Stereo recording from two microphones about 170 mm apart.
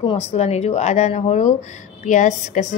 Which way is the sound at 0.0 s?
35° left (ahead or behind).